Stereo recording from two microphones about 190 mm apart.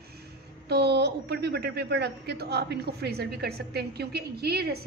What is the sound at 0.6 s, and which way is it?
A woman's voice, 60° right (ahead or behind).